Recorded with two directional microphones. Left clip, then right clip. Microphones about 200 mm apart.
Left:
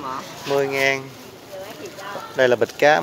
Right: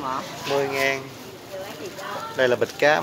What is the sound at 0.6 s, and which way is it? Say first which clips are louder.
Speech: left 4 dB; 40° left (ahead or behind).